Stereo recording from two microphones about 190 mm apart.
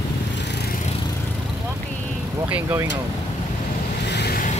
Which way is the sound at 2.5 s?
10° right (ahead or behind).